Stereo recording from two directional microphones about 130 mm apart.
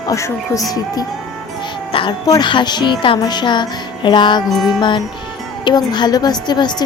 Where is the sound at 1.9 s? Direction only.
40° left (ahead or behind).